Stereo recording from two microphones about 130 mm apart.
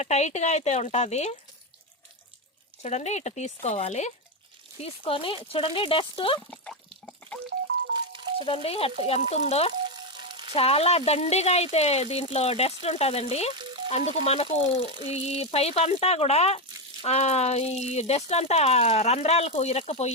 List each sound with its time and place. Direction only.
0.0 s speech: 60° left (ahead or behind)
2.8 s speech: 60° left (ahead or behind)
4.8 s speech: 45° left (ahead or behind)
7.9 s music: 40° right (ahead or behind)
8.4 s speech: 45° left (ahead or behind)
9.8 s a sound: 40° right (ahead or behind)
10.5 s speech: 50° left (ahead or behind)